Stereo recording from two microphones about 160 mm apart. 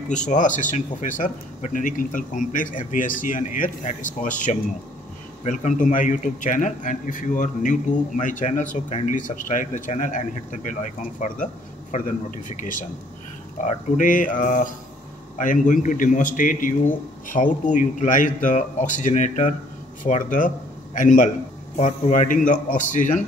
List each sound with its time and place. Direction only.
0.3 s speech: 50° left (ahead or behind)